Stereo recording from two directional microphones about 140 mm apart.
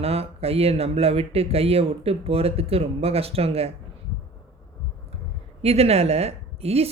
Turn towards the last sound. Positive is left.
turn(degrees=-45)  # may be behind; listen again after turning